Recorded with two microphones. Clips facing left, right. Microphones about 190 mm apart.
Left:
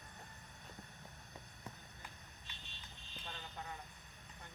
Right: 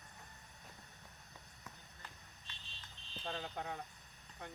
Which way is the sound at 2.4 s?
30° right (ahead or behind).